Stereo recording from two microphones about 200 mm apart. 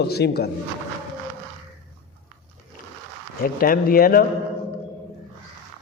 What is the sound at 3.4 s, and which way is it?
Speech, 45° left (ahead or behind).